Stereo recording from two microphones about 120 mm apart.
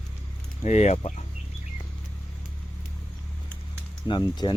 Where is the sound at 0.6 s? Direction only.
70° left (ahead or behind).